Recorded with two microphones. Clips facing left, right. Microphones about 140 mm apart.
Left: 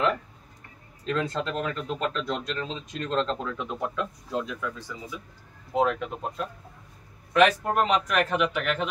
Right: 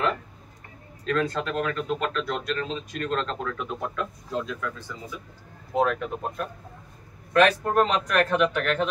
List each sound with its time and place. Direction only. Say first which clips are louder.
1.0 s a man's voice: right 2 dB; 20° left (ahead or behind)